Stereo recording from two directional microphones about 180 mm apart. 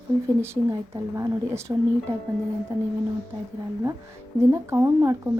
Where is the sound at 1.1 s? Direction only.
15° right (ahead or behind).